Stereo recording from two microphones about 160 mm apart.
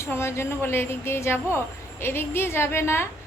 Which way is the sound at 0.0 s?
15° left (ahead or behind).